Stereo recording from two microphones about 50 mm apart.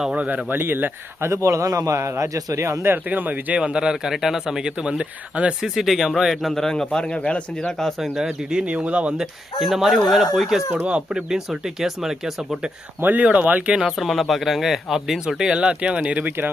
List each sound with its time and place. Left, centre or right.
0.5 s speech: right
1.3 s a man's voice: right
3.1 s speech: right
3.6 s speech: centre
5.6 s speech: centre
6.5 s a man's voice: centre
7.8 s a man's voice: centre
8.1 s speech: centre
9.6 s speech: centre
13.0 s speech: right
14.0 s speech: centre
15.4 s speech: right